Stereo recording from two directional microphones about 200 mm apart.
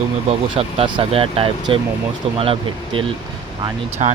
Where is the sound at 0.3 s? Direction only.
25° right (ahead or behind).